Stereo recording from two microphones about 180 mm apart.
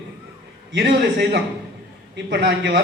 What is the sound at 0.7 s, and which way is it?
Speech, 80° right.